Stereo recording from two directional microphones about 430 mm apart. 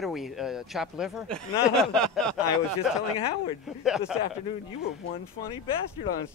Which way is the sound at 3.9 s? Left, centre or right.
Centre.